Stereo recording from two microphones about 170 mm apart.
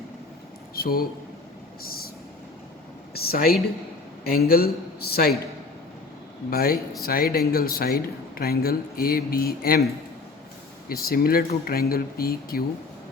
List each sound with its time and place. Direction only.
0.8 s speech: 60° left (ahead or behind)
1.8 s vehicle: 60° left (ahead or behind)
3.2 s speech: 60° left (ahead or behind)
6.5 s speech: 60° left (ahead or behind)
10.8 s speech: 60° left (ahead or behind)